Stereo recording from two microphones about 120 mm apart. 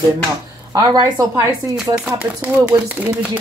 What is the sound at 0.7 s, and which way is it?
Speech, 30° right (ahead or behind).